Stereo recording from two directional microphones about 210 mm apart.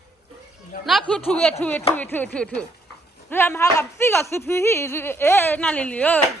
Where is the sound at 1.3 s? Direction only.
5° left (ahead or behind).